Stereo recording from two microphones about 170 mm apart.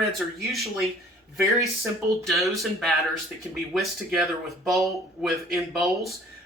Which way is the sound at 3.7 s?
Centre (ahead or behind).